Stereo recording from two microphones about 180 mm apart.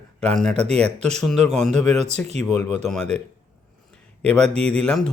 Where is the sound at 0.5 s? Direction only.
35° right (ahead or behind).